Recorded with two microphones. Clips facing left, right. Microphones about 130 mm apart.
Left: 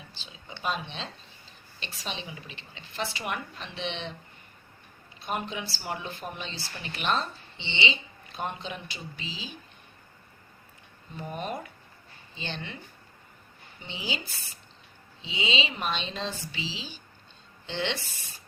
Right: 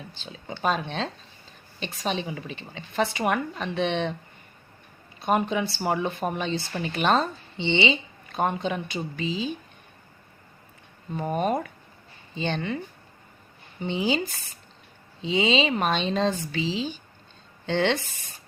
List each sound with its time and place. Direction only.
0.2 s a woman's voice: 45° right (ahead or behind)
5.2 s a woman's voice: 50° right (ahead or behind)
11.1 s a woman's voice: 50° right (ahead or behind)
13.8 s a woman's voice: 50° right (ahead or behind)